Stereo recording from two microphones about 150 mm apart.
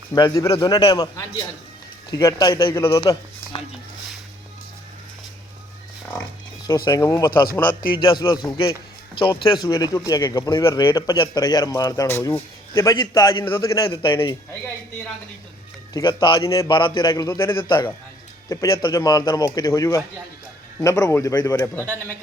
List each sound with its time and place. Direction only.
0.1 s a man's voice: 25° left (ahead or behind)
6.7 s a man's voice: 25° left (ahead or behind)
7.9 s a man's voice: 35° left (ahead or behind)
13.4 s a man's voice: 20° left (ahead or behind)
13.8 s a man's voice: 35° left (ahead or behind)
15.9 s a man's voice: 30° left (ahead or behind)